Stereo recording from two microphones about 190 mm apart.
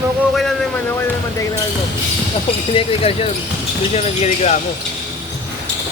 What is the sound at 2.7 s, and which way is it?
Speech, 30° left (ahead or behind).